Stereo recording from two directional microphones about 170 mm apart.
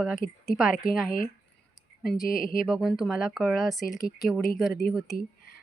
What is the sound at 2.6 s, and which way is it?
Speech, centre (ahead or behind).